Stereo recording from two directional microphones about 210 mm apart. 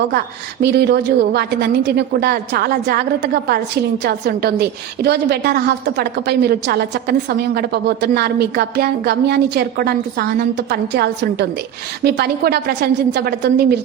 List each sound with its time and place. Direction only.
0.6 s a woman's voice: 50° right (ahead or behind)